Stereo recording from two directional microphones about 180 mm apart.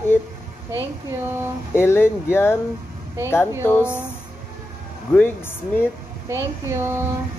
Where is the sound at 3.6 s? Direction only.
15° left (ahead or behind).